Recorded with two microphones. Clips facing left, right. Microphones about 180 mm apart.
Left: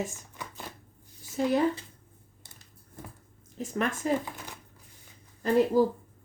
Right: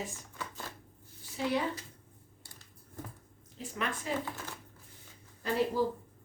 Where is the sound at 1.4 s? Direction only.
45° left (ahead or behind).